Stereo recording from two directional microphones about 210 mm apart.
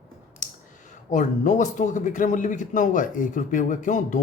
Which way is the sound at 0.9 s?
35° left (ahead or behind).